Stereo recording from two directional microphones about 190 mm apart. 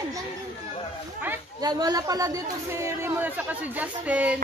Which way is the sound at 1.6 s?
20° right (ahead or behind).